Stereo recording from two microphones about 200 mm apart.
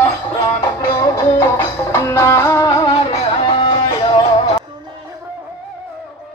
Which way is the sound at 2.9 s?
30° left (ahead or behind).